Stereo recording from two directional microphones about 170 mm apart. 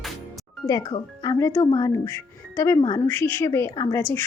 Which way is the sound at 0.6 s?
20° left (ahead or behind).